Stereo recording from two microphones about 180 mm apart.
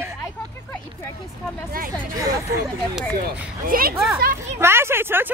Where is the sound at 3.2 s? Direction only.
55° right (ahead or behind).